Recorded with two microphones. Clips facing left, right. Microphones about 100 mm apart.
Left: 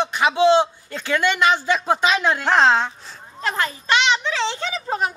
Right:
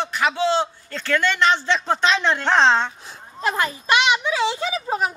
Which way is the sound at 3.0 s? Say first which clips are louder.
Right 2 dB; 10° right (ahead or behind).